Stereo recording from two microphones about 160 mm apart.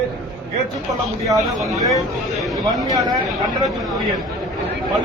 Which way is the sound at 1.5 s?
Centre (ahead or behind).